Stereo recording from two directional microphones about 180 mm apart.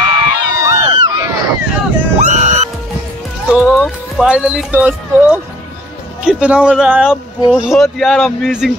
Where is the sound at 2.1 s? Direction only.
40° right (ahead or behind).